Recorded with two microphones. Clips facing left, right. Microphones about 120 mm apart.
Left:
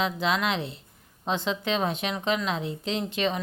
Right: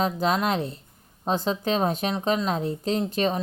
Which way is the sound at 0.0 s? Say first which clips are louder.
Right 3 dB; 40° right (ahead or behind).